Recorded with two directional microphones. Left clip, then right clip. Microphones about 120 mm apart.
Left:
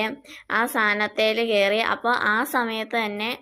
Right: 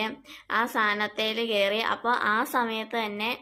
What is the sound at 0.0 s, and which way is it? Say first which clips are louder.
A woman's voice: left 4 dB; 40° left (ahead or behind).